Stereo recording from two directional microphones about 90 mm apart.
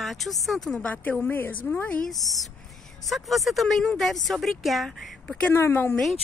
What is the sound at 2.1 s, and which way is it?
Speech, centre (ahead or behind).